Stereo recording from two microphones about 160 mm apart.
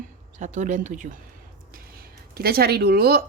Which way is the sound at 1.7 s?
70° right (ahead or behind).